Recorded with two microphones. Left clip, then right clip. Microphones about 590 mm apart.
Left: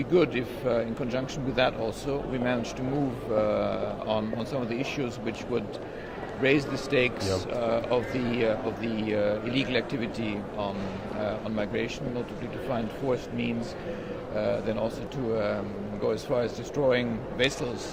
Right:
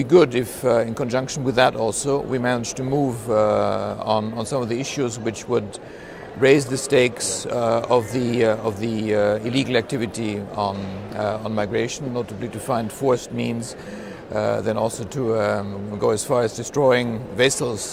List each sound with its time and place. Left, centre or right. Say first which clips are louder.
0.0 s a man's voice: right 9 dB; right